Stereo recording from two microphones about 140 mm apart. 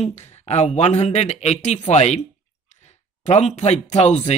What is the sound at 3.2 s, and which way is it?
Speech, 50° left (ahead or behind).